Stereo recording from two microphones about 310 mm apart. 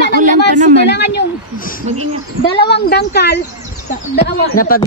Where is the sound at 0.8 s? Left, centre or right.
Left.